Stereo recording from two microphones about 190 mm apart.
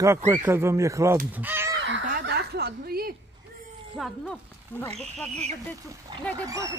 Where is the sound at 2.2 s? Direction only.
60° right (ahead or behind).